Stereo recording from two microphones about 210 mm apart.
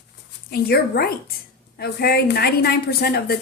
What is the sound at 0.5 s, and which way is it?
A woman's voice, 45° left (ahead or behind).